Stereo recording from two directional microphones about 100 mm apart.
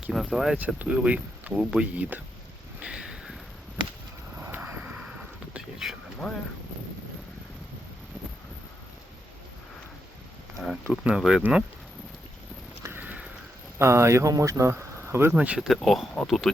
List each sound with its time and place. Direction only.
0.1 s speech: centre (ahead or behind)
2.8 s a sound: 10° right (ahead or behind)
4.4 s vehicle: 25° right (ahead or behind)
4.7 s vehicle: 15° right (ahead or behind); by 6.4 s 5° left (ahead or behind)
10.6 s a sound: centre (ahead or behind)
11.0 s speech: 5° right (ahead or behind)
12.8 s a sound: 20° right (ahead or behind)
13.7 s speech: 30° right (ahead or behind)
15.4 s speech: 10° right (ahead or behind)
15.6 s speech: centre (ahead or behind)